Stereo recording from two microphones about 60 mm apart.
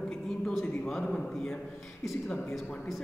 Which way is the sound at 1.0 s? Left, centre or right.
Centre.